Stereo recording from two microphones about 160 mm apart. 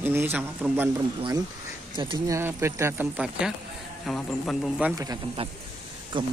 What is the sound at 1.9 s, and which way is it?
Speech, 30° right (ahead or behind).